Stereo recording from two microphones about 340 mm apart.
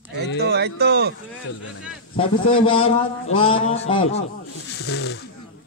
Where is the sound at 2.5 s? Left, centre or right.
Centre.